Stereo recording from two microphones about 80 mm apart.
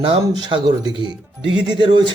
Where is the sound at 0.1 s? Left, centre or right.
Right.